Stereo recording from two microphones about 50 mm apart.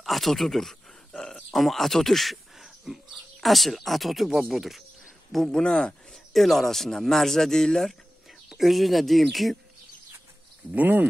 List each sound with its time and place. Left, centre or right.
0.0 s a sound: centre
1.5 s speech: centre
5.3 s speech: centre
6.3 s speech: centre
8.5 s speech: centre
10.7 s speech: right